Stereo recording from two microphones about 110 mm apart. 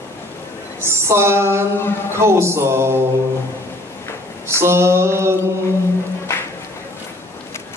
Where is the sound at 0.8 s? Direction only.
25° right (ahead or behind).